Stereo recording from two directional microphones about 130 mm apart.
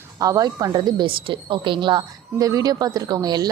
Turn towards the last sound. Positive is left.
turn(degrees=-30)  # may be behind; listen again after turning